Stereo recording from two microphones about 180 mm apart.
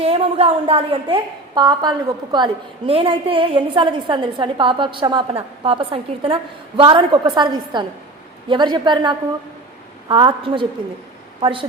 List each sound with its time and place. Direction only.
0.0 s a woman's voice: 35° right (ahead or behind)